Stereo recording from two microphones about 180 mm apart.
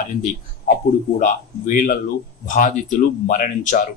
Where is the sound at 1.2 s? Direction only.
45° left (ahead or behind).